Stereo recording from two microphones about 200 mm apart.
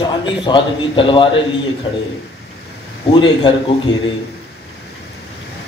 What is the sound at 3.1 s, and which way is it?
Speech, 25° left (ahead or behind).